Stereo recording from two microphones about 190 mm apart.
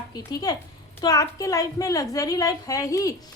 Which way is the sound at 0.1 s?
20° left (ahead or behind).